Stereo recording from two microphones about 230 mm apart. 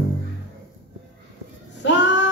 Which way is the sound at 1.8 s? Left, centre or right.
Left.